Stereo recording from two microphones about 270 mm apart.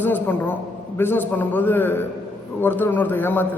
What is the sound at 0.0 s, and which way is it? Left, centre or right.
A man's voice, centre.